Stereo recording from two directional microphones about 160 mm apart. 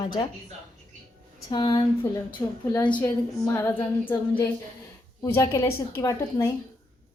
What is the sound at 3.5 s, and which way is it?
Female singing, 15° left (ahead or behind).